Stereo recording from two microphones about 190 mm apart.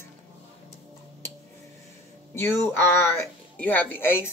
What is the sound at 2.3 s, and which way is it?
Speech, 15° left (ahead or behind).